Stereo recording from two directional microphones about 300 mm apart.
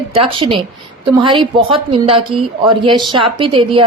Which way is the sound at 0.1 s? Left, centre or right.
Centre.